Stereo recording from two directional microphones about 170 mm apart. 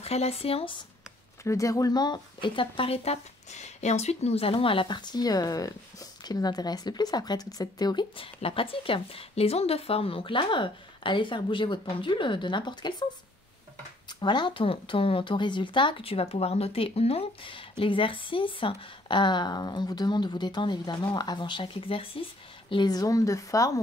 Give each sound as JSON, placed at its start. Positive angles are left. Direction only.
{"t": 0.0, "sound": "speech", "side_deg": 35}
{"t": 1.4, "sound": "speech", "side_deg": 20}
{"t": 14.0, "sound": "speech", "side_deg": 25}